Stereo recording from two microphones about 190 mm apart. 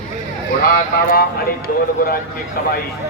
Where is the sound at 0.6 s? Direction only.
50° left (ahead or behind).